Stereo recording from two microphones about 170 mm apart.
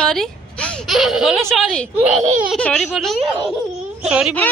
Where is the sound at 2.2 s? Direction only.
45° right (ahead or behind).